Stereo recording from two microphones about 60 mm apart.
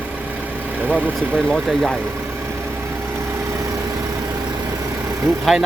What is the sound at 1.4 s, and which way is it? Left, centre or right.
Speech, centre.